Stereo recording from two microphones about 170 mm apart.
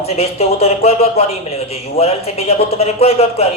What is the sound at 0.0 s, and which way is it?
A man's voice, 35° left (ahead or behind).